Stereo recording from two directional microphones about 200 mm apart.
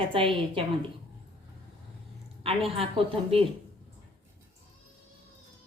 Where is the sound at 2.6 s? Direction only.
30° right (ahead or behind).